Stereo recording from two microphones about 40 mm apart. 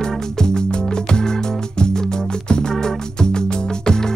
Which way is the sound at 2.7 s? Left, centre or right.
Centre.